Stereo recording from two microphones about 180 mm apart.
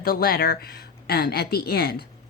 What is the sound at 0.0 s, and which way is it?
Speech, 60° left (ahead or behind).